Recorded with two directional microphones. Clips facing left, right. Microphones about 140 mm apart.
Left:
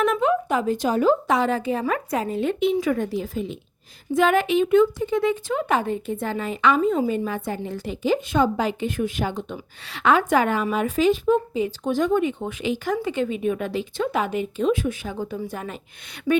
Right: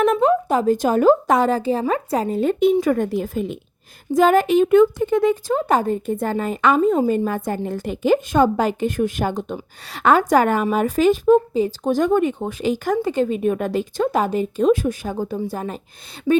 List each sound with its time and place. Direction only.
0.0 s a woman's voice: 40° right (ahead or behind)
4.1 s a woman's voice: 40° right (ahead or behind)